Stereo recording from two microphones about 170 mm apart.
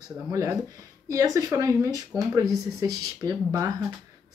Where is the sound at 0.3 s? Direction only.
20° right (ahead or behind).